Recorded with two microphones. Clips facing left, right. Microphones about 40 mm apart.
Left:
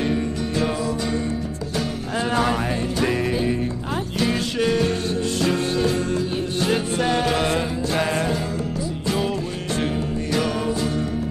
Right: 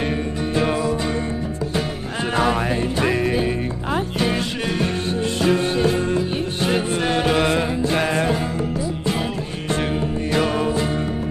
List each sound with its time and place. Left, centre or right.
0.0 s music: right
2.4 s music: centre
9.8 s music: right